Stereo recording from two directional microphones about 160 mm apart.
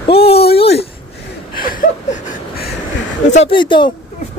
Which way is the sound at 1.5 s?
60° left (ahead or behind).